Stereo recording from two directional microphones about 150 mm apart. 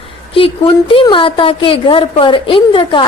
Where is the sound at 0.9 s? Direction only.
35° left (ahead or behind).